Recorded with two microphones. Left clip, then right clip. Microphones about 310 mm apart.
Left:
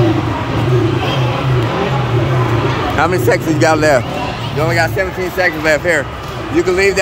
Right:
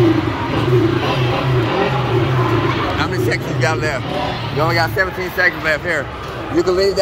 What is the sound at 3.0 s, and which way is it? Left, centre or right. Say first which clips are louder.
Speech: left 6 dB; centre.